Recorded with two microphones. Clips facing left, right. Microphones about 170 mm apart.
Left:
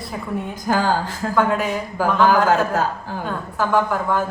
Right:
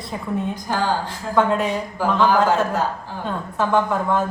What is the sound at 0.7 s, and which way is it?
Speech, 45° left (ahead or behind).